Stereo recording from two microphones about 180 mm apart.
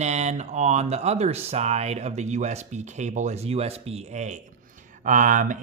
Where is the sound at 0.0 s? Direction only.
40° right (ahead or behind).